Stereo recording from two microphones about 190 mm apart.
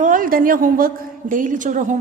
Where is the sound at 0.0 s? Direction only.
45° right (ahead or behind).